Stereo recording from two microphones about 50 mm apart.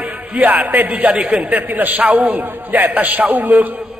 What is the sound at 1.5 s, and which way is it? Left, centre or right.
A man's voice, right.